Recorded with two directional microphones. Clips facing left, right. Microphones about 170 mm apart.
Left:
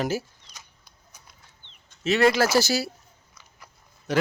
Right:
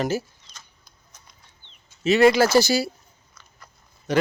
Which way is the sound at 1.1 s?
10° left (ahead or behind).